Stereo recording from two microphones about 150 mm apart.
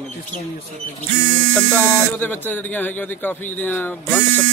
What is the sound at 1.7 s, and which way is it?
A man's voice, 15° left (ahead or behind).